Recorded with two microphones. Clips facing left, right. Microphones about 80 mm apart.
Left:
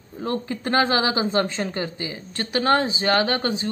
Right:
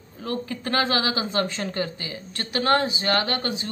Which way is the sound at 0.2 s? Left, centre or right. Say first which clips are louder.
Left 3 dB; left.